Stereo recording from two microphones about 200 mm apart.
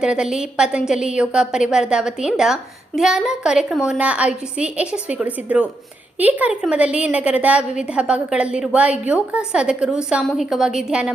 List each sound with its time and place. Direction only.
0.0 s a woman's voice: 5° right (ahead or behind)